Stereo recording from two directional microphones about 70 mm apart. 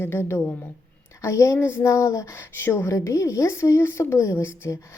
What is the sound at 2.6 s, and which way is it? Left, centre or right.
A woman's voice, left.